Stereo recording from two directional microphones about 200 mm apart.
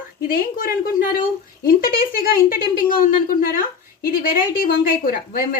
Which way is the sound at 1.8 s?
45° left (ahead or behind).